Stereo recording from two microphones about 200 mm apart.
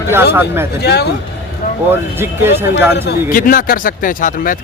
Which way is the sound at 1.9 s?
10° right (ahead or behind).